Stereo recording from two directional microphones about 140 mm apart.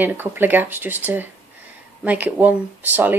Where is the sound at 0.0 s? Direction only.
15° right (ahead or behind).